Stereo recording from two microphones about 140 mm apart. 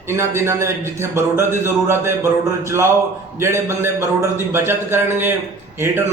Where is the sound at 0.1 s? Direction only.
20° right (ahead or behind).